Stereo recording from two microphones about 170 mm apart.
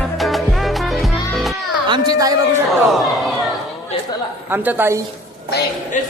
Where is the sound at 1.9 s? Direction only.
20° right (ahead or behind).